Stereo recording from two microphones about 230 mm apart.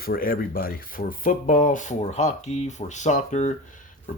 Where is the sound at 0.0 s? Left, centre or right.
Left.